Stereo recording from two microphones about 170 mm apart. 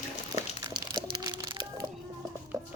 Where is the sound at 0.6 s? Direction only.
25° right (ahead or behind).